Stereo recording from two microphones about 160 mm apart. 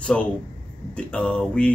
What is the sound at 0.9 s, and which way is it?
Speech, 5° left (ahead or behind).